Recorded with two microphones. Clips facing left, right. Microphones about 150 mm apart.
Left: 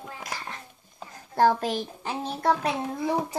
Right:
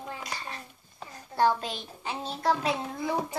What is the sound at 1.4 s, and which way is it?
Speech, 50° left (ahead or behind).